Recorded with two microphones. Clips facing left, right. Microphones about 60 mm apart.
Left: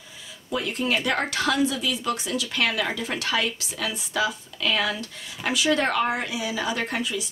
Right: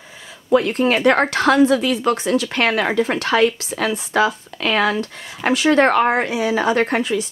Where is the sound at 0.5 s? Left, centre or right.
Right.